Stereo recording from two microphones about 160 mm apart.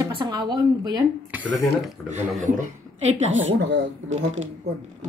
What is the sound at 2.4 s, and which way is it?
A woman's voice, 55° right (ahead or behind).